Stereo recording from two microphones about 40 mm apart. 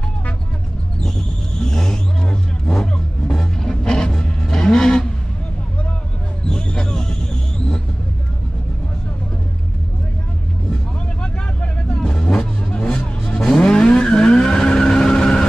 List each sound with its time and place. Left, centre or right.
1.6 s vehicle: centre
2.7 s music: centre
6.4 s a sound: centre
11.6 s vehicle: left
12.7 s music: left
13.6 s vehicle: left